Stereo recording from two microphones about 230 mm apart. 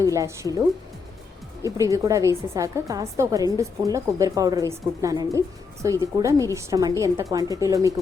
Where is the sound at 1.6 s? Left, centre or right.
Centre.